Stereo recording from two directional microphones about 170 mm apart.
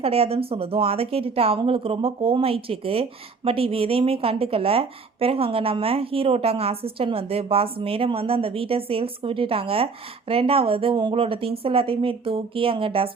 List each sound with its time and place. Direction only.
0.0 s a woman's voice: 35° right (ahead or behind)